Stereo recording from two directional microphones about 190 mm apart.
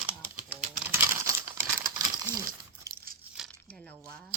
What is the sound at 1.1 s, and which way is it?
Crumpling, 15° right (ahead or behind).